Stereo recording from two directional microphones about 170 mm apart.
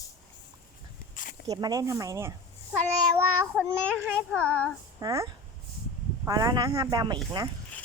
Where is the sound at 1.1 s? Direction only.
50° left (ahead or behind).